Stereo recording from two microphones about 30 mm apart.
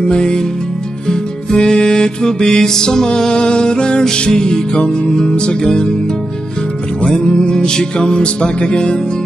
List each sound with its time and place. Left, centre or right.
0.0 s music: left
3.3 s music: left
5.3 s music: left
5.6 s music: left
7.3 s music: left